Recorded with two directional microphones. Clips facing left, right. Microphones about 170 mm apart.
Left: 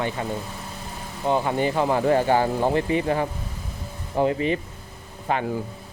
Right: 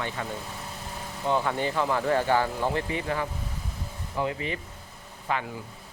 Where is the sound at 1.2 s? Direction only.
15° left (ahead or behind).